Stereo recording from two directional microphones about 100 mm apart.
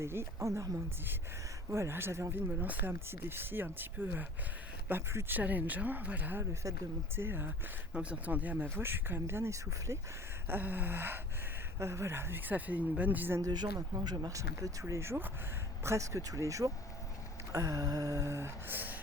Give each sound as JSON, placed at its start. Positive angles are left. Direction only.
{"t": 0.0, "sound": "speech", "side_deg": -25}
{"t": 10.5, "sound": "speech", "side_deg": -20}
{"t": 13.4, "sound": "speech", "side_deg": -40}